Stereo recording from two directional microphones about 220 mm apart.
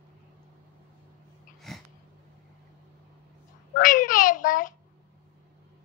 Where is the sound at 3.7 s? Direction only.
35° left (ahead or behind).